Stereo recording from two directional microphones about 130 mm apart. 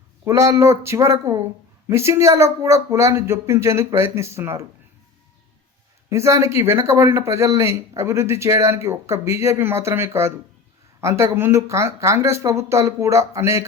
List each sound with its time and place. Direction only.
0.3 s a man's voice: 25° right (ahead or behind)
6.1 s a man's voice: 20° right (ahead or behind)